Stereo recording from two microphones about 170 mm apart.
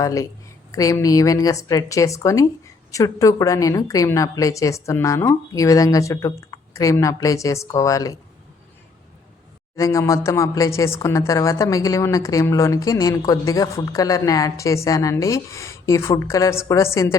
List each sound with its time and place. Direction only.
0.0 s a woman's voice: 20° left (ahead or behind)
9.7 s a woman's voice: 20° left (ahead or behind)